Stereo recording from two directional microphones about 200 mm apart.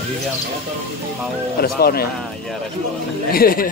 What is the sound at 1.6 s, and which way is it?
Speech, 50° left (ahead or behind).